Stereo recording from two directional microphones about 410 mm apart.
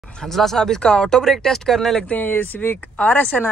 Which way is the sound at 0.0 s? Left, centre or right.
Centre.